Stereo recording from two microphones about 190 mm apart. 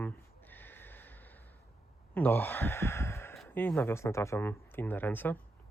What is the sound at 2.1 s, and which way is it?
Speech, 10° left (ahead or behind).